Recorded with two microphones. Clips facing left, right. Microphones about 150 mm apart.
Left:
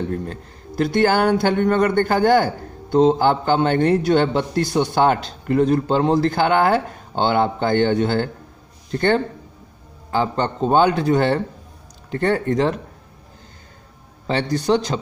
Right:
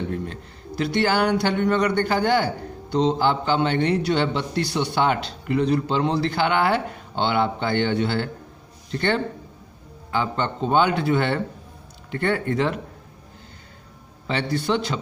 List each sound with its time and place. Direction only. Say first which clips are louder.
0.1 s a man's voice: left 3 dB; 45° left (ahead or behind)
14.2 s a man's voice: left 4 dB; 40° left (ahead or behind)